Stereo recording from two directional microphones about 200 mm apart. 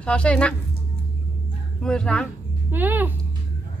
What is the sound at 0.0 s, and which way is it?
Speech, 5° left (ahead or behind).